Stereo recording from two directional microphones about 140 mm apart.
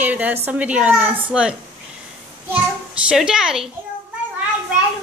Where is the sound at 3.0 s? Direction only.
5° right (ahead or behind).